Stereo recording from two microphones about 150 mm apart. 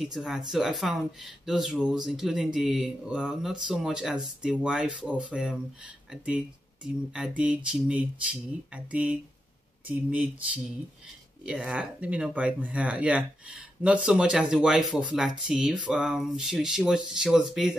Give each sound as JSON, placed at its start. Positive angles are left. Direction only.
{"t": 0.0, "sound": "speech", "side_deg": 0}
{"t": 7.2, "sound": "speech", "side_deg": -5}